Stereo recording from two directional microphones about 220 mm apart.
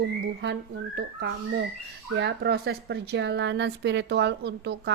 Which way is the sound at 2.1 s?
50° right (ahead or behind).